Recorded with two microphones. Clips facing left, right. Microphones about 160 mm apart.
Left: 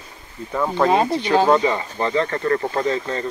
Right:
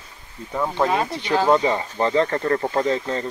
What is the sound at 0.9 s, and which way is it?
Speech, 25° left (ahead or behind).